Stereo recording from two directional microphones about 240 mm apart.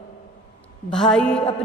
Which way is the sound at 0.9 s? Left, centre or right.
Centre.